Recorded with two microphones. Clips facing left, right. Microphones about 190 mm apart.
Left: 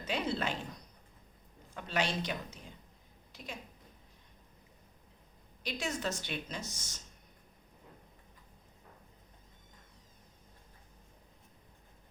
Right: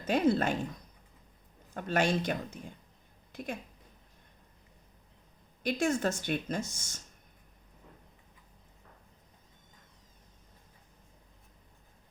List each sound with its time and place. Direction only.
0.0 s speech: 50° right (ahead or behind)
1.7 s speech: 50° right (ahead or behind)
5.6 s speech: 50° right (ahead or behind)